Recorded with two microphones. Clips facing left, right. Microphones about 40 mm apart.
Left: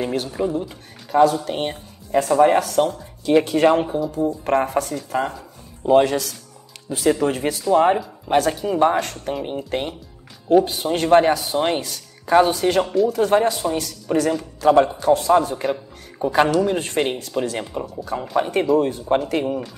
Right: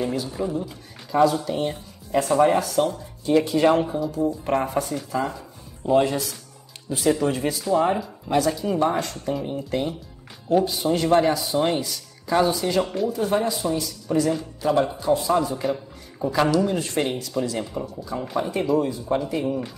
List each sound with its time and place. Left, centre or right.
0.0 s speech: left
15.5 s a sound: left
16.3 s speech: left
17.4 s speech: left